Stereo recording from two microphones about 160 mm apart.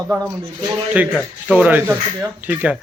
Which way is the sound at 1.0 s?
10° right (ahead or behind).